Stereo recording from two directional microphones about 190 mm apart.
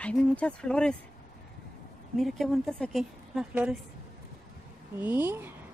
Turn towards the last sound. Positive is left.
turn(degrees=-10)  # may be behind; listen again after turning